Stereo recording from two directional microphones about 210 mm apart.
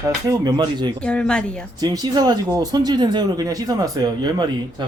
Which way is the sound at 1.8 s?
20° right (ahead or behind).